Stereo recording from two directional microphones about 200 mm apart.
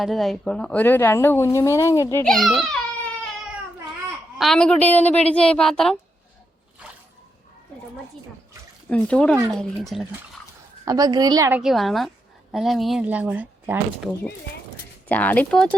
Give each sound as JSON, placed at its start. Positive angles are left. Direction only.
{"t": 0.0, "sound": "speech", "side_deg": 0}
{"t": 2.2, "sound": "baby cry", "side_deg": 0}
{"t": 4.4, "sound": "a woman's voice", "side_deg": 0}
{"t": 8.9, "sound": "a woman's voice", "side_deg": 5}
{"t": 10.8, "sound": "a woman's voice", "side_deg": -20}
{"t": 11.6, "sound": "a woman's voice", "side_deg": 0}
{"t": 15.1, "sound": "speech", "side_deg": 10}